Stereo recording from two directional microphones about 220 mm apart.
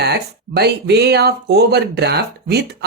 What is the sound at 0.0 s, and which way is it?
Speech, 50° right (ahead or behind).